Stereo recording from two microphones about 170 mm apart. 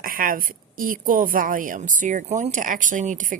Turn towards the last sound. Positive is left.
turn(degrees=-50)  # may be behind; listen again after turning